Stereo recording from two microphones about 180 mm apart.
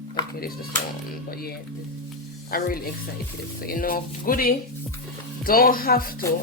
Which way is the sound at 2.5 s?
55° left (ahead or behind).